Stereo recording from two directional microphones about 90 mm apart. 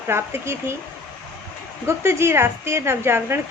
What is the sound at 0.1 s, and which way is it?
Speech, 30° right (ahead or behind).